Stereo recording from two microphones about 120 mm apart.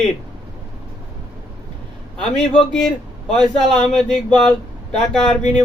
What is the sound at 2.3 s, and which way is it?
Speech, 5° left (ahead or behind).